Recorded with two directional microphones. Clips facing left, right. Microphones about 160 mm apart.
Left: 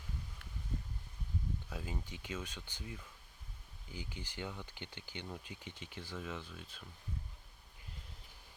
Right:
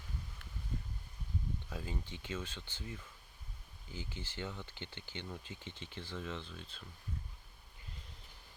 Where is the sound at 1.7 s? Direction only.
10° left (ahead or behind).